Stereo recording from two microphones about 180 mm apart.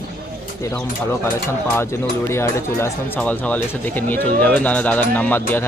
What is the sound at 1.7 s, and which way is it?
Speech, 15° left (ahead or behind).